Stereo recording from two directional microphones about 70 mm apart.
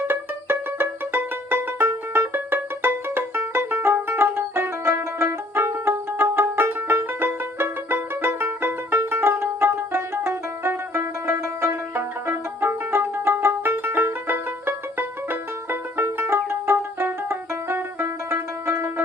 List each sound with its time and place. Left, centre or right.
0.1 s music: right